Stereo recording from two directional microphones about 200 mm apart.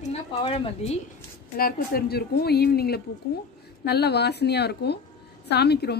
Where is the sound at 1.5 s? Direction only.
50° left (ahead or behind).